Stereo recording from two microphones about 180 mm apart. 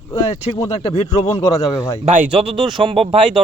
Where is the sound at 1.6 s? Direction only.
20° left (ahead or behind).